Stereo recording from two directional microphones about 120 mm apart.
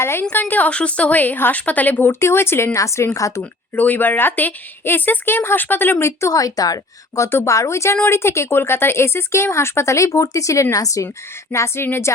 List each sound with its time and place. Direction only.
0.0 s a woman's voice: 20° left (ahead or behind)
3.8 s a woman's voice: 15° left (ahead or behind)